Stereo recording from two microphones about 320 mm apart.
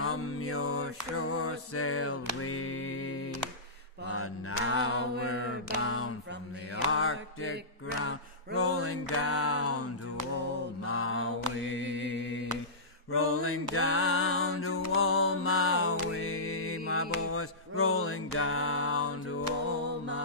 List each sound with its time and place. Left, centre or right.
0.0 s mantra: left
8.5 s a sound: left
10.9 s mantra: left
13.1 s music: left